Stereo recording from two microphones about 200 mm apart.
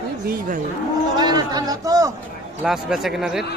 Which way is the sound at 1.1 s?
20° right (ahead or behind).